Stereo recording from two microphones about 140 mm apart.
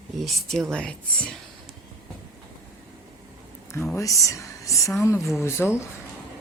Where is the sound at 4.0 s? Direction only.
25° left (ahead or behind).